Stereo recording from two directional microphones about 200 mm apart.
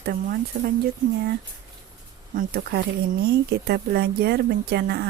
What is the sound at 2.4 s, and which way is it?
A woman's voice, 50° right (ahead or behind).